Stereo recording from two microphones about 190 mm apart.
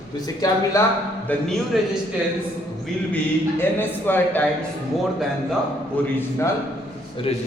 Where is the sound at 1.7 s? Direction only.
Centre (ahead or behind).